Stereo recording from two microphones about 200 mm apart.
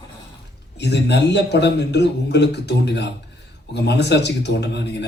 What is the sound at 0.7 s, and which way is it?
Speech, 60° left (ahead or behind).